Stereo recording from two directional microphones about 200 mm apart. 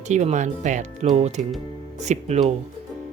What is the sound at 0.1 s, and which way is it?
Speech, 35° right (ahead or behind).